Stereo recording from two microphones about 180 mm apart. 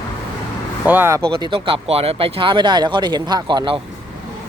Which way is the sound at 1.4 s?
30° right (ahead or behind).